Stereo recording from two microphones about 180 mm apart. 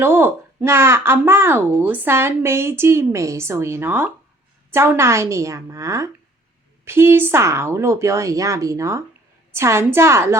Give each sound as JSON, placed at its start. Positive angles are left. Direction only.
{"t": 0.0, "sound": "a woman's voice", "side_deg": -10}